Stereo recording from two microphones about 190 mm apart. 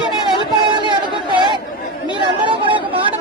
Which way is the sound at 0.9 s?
25° right (ahead or behind).